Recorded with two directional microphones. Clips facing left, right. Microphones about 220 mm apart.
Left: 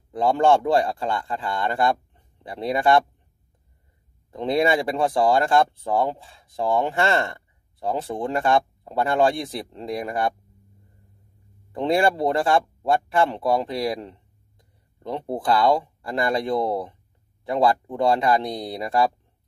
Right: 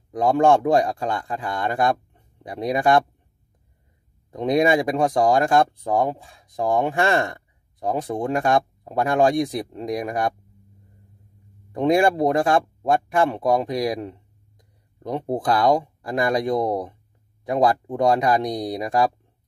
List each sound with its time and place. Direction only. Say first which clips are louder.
0.1 s speech: right 1 dB; 15° right (ahead or behind)
4.3 s speech: right 2 dB; 15° right (ahead or behind)
11.7 s speech: right 3 dB; 15° right (ahead or behind)